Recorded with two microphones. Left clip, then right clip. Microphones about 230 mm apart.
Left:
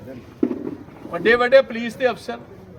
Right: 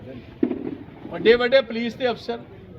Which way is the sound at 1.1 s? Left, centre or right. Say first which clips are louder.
Left 2 dB; centre.